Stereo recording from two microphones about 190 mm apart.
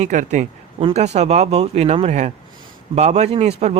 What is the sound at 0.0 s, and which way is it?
Speech, 40° right (ahead or behind).